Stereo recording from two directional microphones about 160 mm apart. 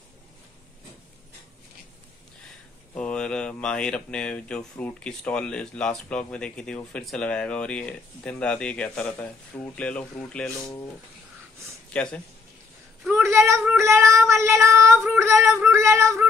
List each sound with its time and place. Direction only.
2.9 s speech: 5° left (ahead or behind)
11.9 s speech: 5° left (ahead or behind)
13.1 s a sound: 15° right (ahead or behind)
13.7 s child singing: 20° right (ahead or behind)
15.1 s a sound: 15° right (ahead or behind)
15.7 s female singing: 15° right (ahead or behind)